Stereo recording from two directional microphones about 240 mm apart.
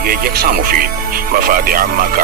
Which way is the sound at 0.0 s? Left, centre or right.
Right.